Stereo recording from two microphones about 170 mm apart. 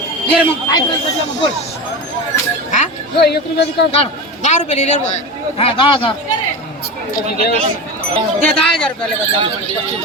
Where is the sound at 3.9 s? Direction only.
40° left (ahead or behind).